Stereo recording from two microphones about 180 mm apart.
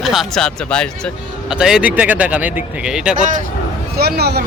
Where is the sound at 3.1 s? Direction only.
45° right (ahead or behind).